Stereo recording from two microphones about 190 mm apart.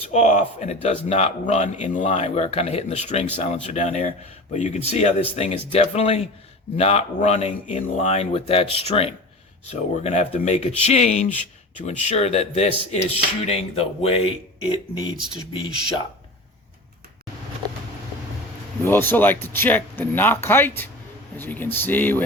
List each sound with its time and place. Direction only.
0.1 s speech: 40° left (ahead or behind)
18.9 s speech: 10° left (ahead or behind)